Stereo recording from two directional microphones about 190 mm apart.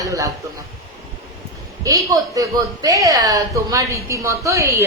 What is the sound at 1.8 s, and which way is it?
A woman's voice, 15° right (ahead or behind).